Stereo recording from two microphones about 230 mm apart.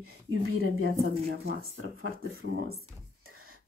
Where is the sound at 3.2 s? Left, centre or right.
Right.